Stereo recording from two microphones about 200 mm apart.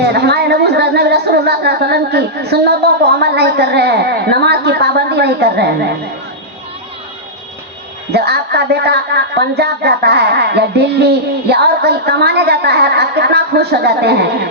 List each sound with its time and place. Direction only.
0.0 s music: 55° right (ahead or behind)
3.2 s a woman's voice: 55° right (ahead or behind)
8.1 s a woman's voice: 55° right (ahead or behind)